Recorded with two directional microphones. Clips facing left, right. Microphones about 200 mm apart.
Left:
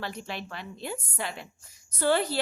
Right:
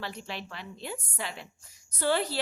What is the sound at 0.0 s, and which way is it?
A woman's voice, 45° left (ahead or behind).